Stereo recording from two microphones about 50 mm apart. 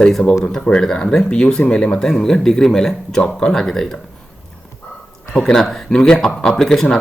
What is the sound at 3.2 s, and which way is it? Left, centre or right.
Speech, left.